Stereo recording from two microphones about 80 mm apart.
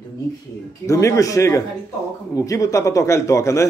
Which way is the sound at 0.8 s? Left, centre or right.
Left.